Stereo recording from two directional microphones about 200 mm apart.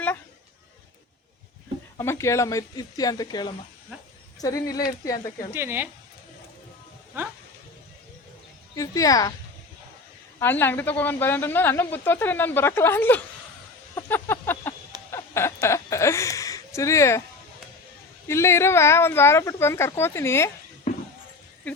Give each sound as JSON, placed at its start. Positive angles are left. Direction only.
{"t": 2.0, "sound": "speech", "side_deg": 15}
{"t": 5.5, "sound": "speech", "side_deg": -10}
{"t": 8.7, "sound": "speech", "side_deg": 15}
{"t": 10.4, "sound": "speech", "side_deg": 10}
{"t": 13.9, "sound": "a sound", "side_deg": 10}
{"t": 18.3, "sound": "speech", "side_deg": 15}
{"t": 20.9, "sound": "a sound", "side_deg": 35}